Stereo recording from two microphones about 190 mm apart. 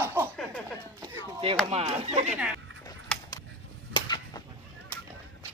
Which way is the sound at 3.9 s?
20° left (ahead or behind).